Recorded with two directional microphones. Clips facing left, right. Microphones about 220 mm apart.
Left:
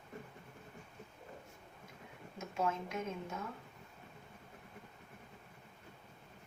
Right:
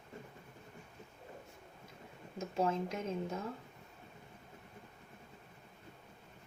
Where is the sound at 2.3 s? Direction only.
35° right (ahead or behind).